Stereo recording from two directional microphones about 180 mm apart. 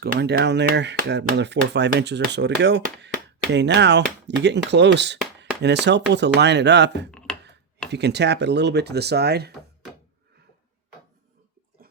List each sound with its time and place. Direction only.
0.0 s speech: 65° right (ahead or behind)
7.3 s a sound: 5° left (ahead or behind)
7.9 s speech: 70° right (ahead or behind)